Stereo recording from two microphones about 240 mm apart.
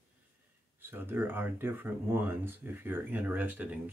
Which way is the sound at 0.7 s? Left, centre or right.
Centre.